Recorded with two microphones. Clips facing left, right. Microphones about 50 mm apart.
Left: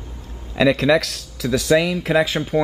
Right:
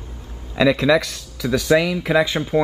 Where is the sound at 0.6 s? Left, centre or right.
Centre.